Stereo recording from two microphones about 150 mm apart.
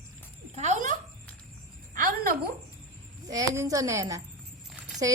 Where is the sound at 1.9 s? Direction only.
70° right (ahead or behind).